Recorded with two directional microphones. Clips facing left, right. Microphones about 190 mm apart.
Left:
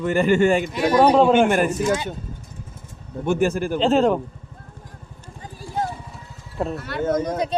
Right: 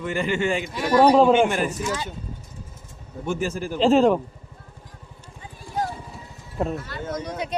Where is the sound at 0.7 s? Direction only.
20° left (ahead or behind).